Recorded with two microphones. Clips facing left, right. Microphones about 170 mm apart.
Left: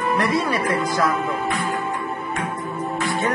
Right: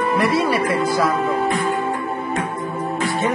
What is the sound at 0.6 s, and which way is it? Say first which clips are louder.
Speech: right 3 dB; 30° right (ahead or behind).